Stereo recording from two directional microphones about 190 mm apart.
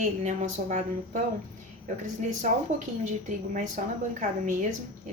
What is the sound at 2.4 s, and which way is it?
A woman's voice, 40° right (ahead or behind).